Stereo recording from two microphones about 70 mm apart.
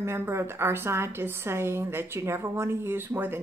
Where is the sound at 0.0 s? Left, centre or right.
Right.